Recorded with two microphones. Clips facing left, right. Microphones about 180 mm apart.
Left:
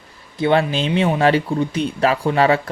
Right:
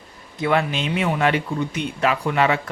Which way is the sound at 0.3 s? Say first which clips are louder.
Left 4 dB; 30° left (ahead or behind).